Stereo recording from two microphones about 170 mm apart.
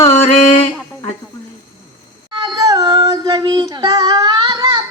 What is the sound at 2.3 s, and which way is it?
Child singing, 25° right (ahead or behind).